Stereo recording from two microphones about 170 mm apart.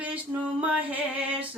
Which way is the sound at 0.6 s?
10° right (ahead or behind).